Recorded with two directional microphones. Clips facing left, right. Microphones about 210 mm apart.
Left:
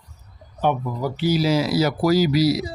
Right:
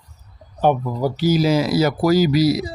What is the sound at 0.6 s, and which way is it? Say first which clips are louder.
Speech: right 4 dB; 35° right (ahead or behind).